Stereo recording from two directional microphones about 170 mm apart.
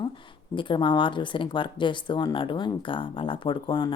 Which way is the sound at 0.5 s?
30° left (ahead or behind).